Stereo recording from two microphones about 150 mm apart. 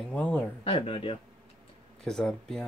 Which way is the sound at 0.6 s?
35° left (ahead or behind).